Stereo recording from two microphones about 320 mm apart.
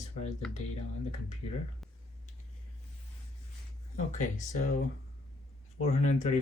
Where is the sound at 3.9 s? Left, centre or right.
Left.